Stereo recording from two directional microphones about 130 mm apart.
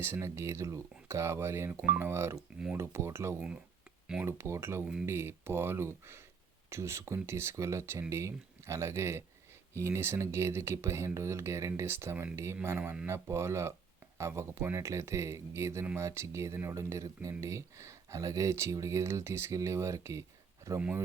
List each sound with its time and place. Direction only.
0.0 s speech: 20° right (ahead or behind)